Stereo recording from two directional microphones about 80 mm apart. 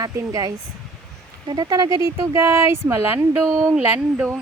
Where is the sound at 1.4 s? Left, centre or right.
Right.